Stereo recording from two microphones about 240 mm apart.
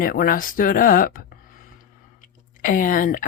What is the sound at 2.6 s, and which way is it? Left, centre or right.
Speech, left.